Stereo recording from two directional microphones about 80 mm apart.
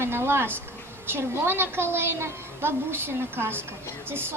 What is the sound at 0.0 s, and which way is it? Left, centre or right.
A child's voice, right.